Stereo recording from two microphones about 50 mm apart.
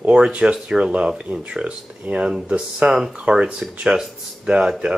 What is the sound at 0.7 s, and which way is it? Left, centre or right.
Speech, centre.